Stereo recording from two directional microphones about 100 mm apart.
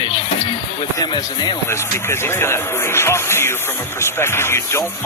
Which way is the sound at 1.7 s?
25° left (ahead or behind).